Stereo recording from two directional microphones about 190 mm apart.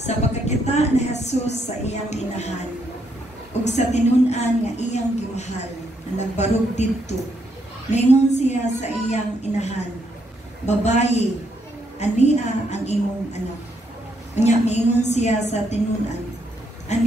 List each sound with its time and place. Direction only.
0.0 s a woman's voice: 35° left (ahead or behind)
3.6 s a woman's voice: 35° left (ahead or behind)
16.9 s a woman's voice: 35° left (ahead or behind)